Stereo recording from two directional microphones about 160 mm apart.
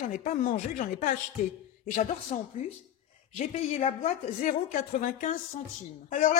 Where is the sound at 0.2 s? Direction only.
50° left (ahead or behind).